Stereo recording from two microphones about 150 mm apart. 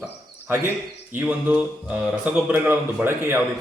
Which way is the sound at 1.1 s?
10° right (ahead or behind).